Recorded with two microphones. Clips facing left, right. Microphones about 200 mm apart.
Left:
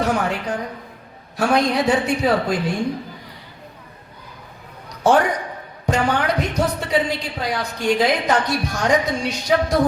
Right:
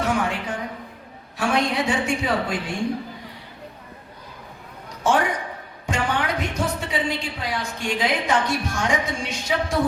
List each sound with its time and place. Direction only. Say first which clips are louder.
0.0 s a woman's voice: left 3 dB; 40° left (ahead or behind)
4.9 s a sound: left 5 dB; 35° left (ahead or behind)
5.8 s a woman's voice: left 5 dB; 40° left (ahead or behind)